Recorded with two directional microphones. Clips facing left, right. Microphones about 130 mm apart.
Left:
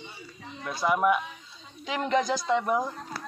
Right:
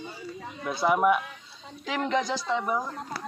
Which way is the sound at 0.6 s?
10° right (ahead or behind).